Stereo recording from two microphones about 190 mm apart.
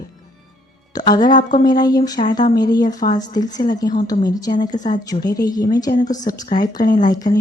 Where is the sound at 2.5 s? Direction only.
20° left (ahead or behind).